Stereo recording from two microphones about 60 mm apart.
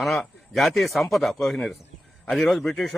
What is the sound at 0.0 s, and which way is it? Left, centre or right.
A man's voice, centre.